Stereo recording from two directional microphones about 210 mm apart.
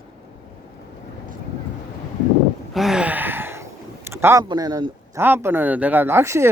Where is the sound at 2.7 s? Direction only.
Centre (ahead or behind).